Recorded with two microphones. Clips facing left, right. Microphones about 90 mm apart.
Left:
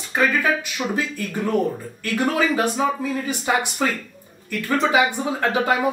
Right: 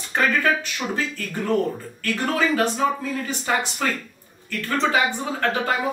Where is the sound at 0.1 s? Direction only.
5° left (ahead or behind).